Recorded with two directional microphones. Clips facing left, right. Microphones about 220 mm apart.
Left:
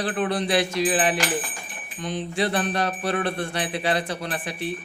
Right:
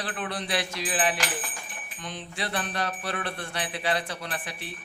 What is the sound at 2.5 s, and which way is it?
Speech, 45° left (ahead or behind).